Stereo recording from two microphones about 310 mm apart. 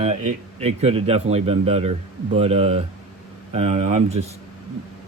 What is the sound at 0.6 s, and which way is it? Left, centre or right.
Speech, right.